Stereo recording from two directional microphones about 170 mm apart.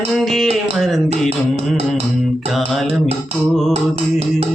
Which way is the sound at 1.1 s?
35° right (ahead or behind).